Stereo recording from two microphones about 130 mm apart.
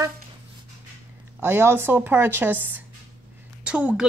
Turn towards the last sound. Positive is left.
turn(degrees=-10)  # may be behind; listen again after turning